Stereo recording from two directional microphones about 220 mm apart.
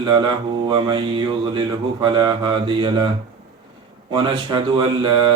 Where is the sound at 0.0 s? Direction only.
20° right (ahead or behind).